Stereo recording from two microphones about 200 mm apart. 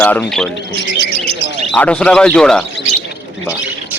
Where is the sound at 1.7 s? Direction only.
5° left (ahead or behind).